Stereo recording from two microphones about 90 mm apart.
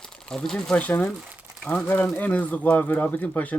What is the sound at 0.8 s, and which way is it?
Speech, 15° left (ahead or behind).